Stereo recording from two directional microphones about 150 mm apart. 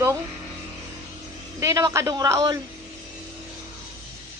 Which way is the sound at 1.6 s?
20° right (ahead or behind).